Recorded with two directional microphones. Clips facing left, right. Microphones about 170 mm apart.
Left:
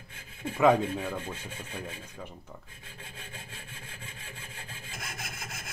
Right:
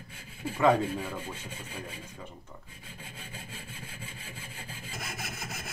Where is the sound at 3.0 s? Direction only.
10° right (ahead or behind).